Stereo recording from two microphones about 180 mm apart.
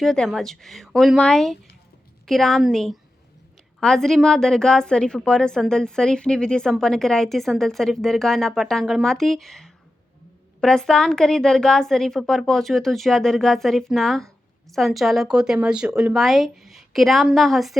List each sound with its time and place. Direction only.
0.0 s a woman's voice: centre (ahead or behind)